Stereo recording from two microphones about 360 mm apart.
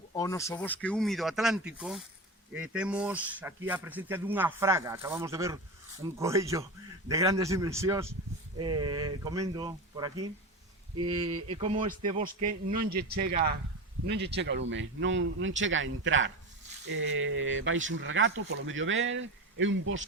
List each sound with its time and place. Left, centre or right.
0.1 s a man's voice: centre; by 20.1 s right